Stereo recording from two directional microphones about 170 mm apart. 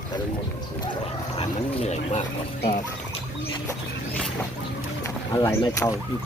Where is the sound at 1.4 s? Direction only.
40° left (ahead or behind).